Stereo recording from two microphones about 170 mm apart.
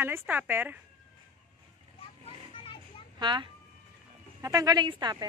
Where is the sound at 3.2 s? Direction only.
25° right (ahead or behind).